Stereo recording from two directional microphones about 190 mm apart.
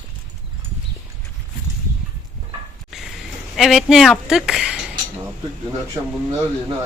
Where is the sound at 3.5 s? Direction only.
Centre (ahead or behind).